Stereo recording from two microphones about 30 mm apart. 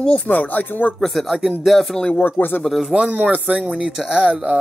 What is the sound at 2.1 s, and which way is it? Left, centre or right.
Speech, left.